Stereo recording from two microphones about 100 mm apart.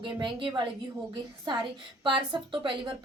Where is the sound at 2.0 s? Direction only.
55° right (ahead or behind).